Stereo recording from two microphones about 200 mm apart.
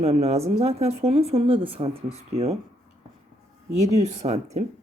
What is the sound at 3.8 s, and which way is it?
Speech, 35° right (ahead or behind).